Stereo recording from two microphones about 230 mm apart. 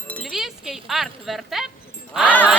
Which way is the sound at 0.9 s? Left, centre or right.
Centre.